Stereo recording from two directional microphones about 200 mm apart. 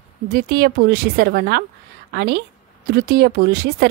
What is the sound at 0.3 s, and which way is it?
A woman's voice, 50° right (ahead or behind).